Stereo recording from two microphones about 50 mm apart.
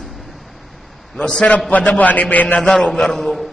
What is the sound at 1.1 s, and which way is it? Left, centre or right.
Speech, centre.